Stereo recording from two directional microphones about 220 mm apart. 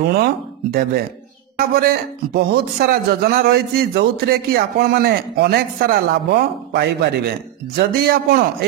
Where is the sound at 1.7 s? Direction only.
45° right (ahead or behind).